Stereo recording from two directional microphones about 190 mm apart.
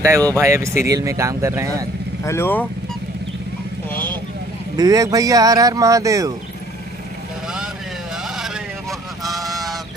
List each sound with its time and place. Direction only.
0.0 s speech: 15° right (ahead or behind)
2.2 s speech: 10° left (ahead or behind)
3.9 s vehicle: 10° left (ahead or behind)
4.7 s speech: 20° right (ahead or behind)
9.2 s honk: centre (ahead or behind)